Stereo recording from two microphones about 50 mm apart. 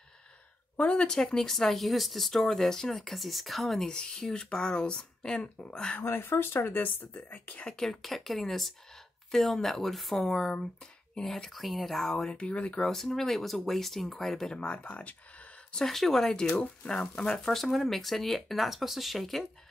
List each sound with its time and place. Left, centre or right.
0.7 s speech: left; by 3.9 s centre
3.9 s speech: centre
6.0 s speech: left
7.6 s speech: centre
11.5 s speech: centre; by 12.8 s left
12.8 s speech: centre
14.6 s speech: left
15.8 s speech: centre